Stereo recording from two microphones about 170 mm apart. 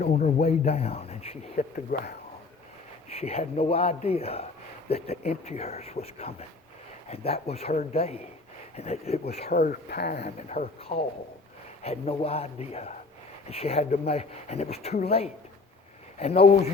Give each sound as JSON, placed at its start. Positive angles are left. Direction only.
{"t": 0.0, "sound": "speech", "side_deg": 45}
{"t": 1.7, "sound": "speech", "side_deg": 60}
{"t": 3.1, "sound": "speech", "side_deg": 35}
{"t": 9.5, "sound": "speech", "side_deg": 55}
{"t": 10.2, "sound": "speech", "side_deg": 40}